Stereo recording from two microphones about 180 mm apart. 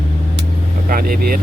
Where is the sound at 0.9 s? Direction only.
55° right (ahead or behind).